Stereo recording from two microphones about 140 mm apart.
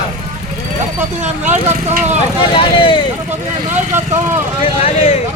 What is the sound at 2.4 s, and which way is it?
Vehicle, 35° left (ahead or behind).